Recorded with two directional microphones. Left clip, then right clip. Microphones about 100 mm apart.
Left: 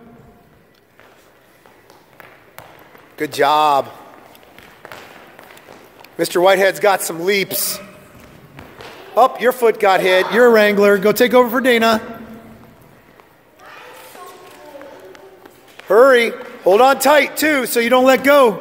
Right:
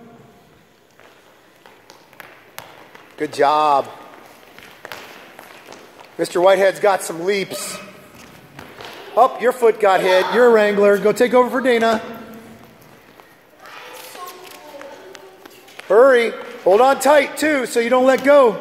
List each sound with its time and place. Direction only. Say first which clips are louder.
3.2 s speech: left 1 dB; 50° left (ahead or behind)
6.1 s speech: left 1 dB; 60° left (ahead or behind)
9.1 s speech: left 1 dB; 55° left (ahead or behind)
15.9 s speech: left 1 dB; 55° left (ahead or behind)